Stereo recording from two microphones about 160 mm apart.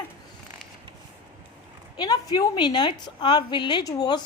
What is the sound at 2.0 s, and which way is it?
A woman's voice, 25° left (ahead or behind).